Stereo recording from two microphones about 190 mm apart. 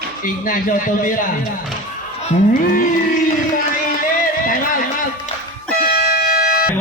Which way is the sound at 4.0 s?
45° left (ahead or behind).